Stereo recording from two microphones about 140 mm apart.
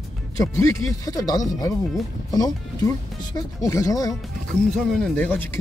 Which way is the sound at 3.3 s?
25° left (ahead or behind).